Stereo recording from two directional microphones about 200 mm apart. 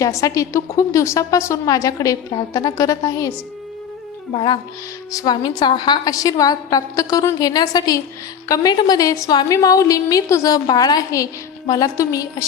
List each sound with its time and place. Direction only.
0.0 s a woman's voice: 15° left (ahead or behind)
5.1 s a woman's voice: 20° left (ahead or behind)